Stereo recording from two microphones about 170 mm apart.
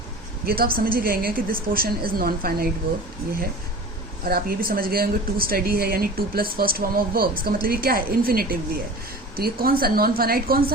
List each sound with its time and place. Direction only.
0.4 s speech: 60° right (ahead or behind)
4.3 s speech: 60° right (ahead or behind)